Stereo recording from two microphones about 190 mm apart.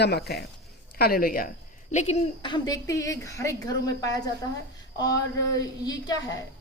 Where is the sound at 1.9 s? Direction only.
35° left (ahead or behind).